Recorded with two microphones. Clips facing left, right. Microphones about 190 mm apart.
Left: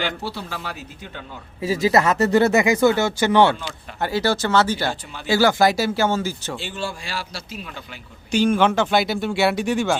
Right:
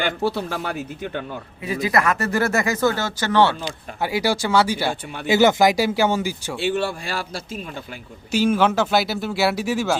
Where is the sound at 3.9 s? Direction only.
10° right (ahead or behind).